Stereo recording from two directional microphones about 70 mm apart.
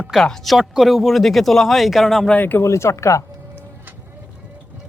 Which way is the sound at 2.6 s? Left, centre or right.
Left.